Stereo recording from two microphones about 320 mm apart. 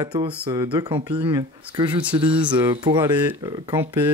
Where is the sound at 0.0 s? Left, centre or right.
Centre.